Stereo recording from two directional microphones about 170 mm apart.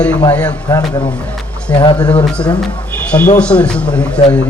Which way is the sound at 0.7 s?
20° left (ahead or behind).